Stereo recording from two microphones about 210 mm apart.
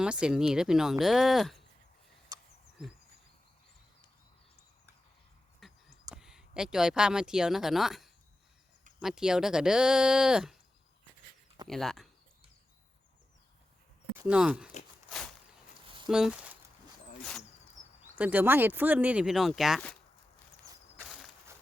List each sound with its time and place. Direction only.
0.0 s speech: 5° right (ahead or behind)
2.3 s a sound: 15° right (ahead or behind)
5.5 s a sound: centre (ahead or behind)
9.0 s speech: 5° right (ahead or behind)
11.7 s speech: centre (ahead or behind)
14.2 s speech: 5° right (ahead or behind)
16.0 s speech: centre (ahead or behind)
18.2 s speech: 10° right (ahead or behind)
21.0 s a sound: centre (ahead or behind)